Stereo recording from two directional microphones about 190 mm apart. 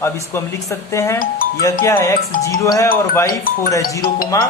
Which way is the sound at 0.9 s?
15° left (ahead or behind).